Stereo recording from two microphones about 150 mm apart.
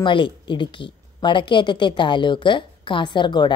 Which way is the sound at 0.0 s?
35° left (ahead or behind).